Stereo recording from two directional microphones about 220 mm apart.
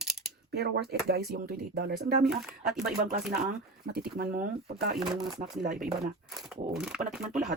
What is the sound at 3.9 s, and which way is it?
Speech, 45° right (ahead or behind).